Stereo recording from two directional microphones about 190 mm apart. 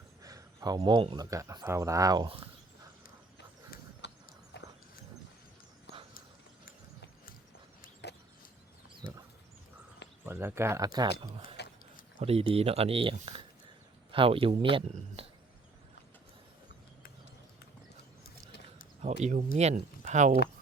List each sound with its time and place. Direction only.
0.2 s speech: 20° right (ahead or behind)
3.3 s a sound: 65° left (ahead or behind)
4.5 s horse: 65° left (ahead or behind)
10.2 s speech: 15° right (ahead or behind); by 11.5 s 30° right (ahead or behind)
11.5 s a sound: 60° left (ahead or behind)
12.2 s speech: 30° right (ahead or behind)
19.0 s speech: 35° right (ahead or behind)